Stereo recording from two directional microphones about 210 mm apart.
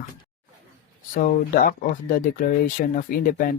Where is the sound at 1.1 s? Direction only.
40° left (ahead or behind).